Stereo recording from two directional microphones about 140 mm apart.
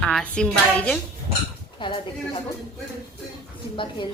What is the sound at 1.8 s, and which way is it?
Speech, 35° left (ahead or behind).